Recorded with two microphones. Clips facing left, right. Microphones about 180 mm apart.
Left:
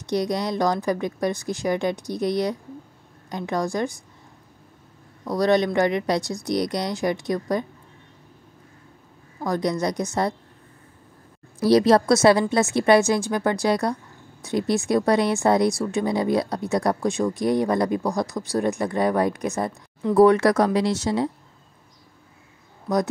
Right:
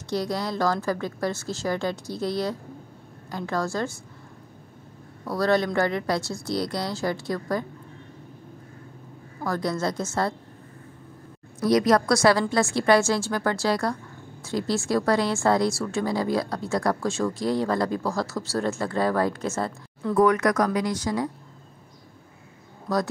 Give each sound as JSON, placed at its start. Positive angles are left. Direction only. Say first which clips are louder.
{"t": 0.0, "sound": "speech", "louder": "left 3 dB", "side_deg": 20}
{"t": 5.2, "sound": "speech", "louder": "left 3 dB", "side_deg": 15}
{"t": 9.4, "sound": "speech", "louder": "left 3 dB", "side_deg": 20}
{"t": 11.6, "sound": "speech", "louder": "left 3 dB", "side_deg": 30}
{"t": 20.2, "sound": "speech", "louder": "left 4 dB", "side_deg": 30}